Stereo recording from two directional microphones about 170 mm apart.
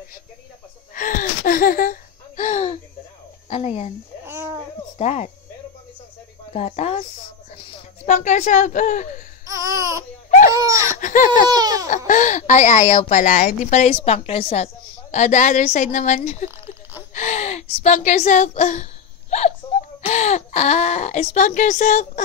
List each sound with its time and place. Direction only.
0.9 s speech: 50° left (ahead or behind); by 3.9 s 35° left (ahead or behind)
4.9 s speech: 40° left (ahead or behind)
6.5 s speech: 40° left (ahead or behind)
9.5 s laughter: 20° right (ahead or behind)
10.5 s baby cry: 20° right (ahead or behind)
11.0 s a sound: 50° left (ahead or behind)
11.5 s baby cry: 20° right (ahead or behind)
12.1 s a woman's voice: 45° left (ahead or behind)
13.9 s a woman's voice: 35° left (ahead or behind)
16.4 s a sound: 15° right (ahead or behind)
17.1 s a woman's voice: 45° left (ahead or behind)
19.3 s a sound: 40° left (ahead or behind)
20.1 s speech: 40° left (ahead or behind)